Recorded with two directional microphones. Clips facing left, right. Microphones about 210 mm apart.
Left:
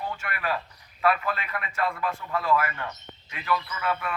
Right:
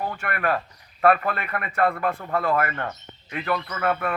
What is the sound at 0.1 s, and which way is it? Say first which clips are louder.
A man's voice: right 5 dB; 55° right (ahead or behind).